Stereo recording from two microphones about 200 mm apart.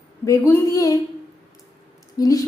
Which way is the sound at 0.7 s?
20° left (ahead or behind).